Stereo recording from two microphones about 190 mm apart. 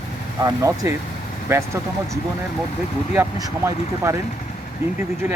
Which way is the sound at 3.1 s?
15° right (ahead or behind).